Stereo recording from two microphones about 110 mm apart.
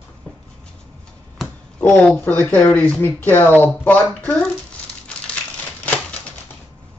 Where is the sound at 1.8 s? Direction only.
15° left (ahead or behind).